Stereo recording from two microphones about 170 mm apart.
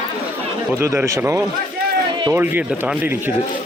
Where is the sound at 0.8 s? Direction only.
15° right (ahead or behind).